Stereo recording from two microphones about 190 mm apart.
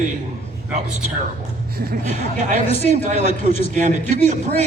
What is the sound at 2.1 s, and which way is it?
A man's voice, 40° right (ahead or behind).